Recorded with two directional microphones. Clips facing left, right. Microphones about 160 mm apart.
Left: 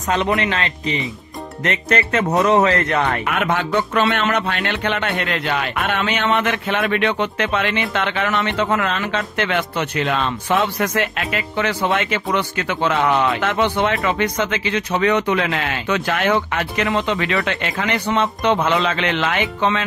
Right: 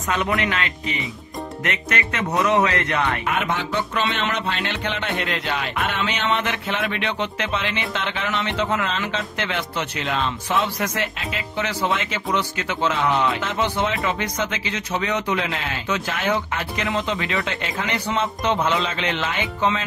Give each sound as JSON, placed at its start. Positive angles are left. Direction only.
{"t": 0.2, "sound": "a man's voice", "side_deg": 25}
{"t": 3.3, "sound": "speech", "side_deg": 55}